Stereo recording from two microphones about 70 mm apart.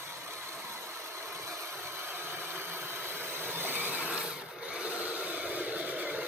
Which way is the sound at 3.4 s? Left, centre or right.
Right.